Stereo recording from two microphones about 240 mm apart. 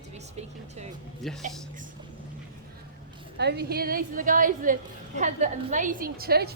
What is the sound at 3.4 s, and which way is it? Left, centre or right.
A woman's voice, right.